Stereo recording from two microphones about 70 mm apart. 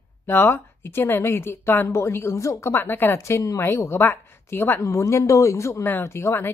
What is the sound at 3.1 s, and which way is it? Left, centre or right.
Speech, left.